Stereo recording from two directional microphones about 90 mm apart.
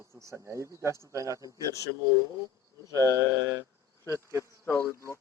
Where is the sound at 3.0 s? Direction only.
35° left (ahead or behind).